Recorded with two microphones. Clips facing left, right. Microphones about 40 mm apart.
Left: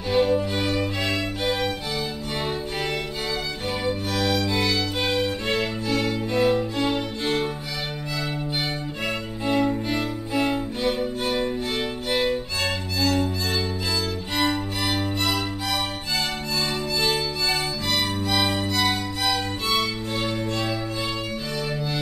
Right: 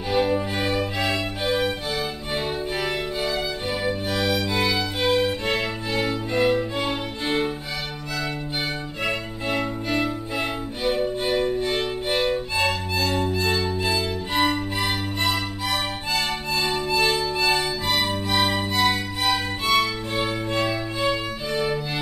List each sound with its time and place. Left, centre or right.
0.1 s music: centre
3.8 s music: centre
9.5 s music: centre
16.5 s music: centre